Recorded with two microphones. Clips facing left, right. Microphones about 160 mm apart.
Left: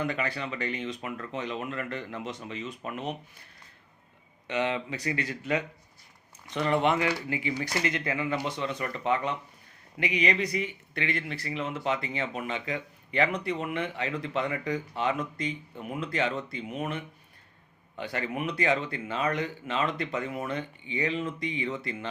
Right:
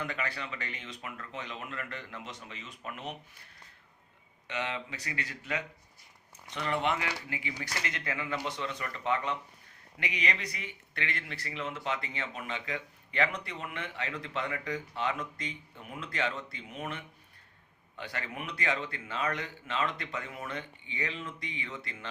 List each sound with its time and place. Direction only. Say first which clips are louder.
0.0 s speech: left 6 dB; 20° left (ahead or behind)
4.4 s speech: left 7 dB; 20° left (ahead or behind)
6.5 s speech: left 6 dB; 20° left (ahead or behind)